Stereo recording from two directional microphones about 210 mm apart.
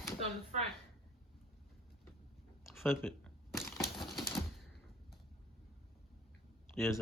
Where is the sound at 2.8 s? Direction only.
10° left (ahead or behind).